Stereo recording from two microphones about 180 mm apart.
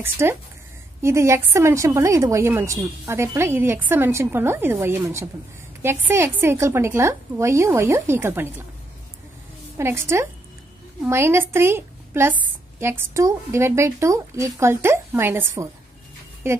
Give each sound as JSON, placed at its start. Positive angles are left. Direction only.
{"t": 0.0, "sound": "speech", "side_deg": -15}
{"t": 9.8, "sound": "speech", "side_deg": -15}